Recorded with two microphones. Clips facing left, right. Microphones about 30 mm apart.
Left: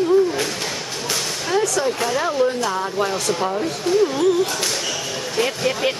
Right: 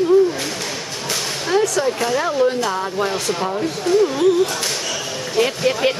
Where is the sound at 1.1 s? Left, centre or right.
Centre.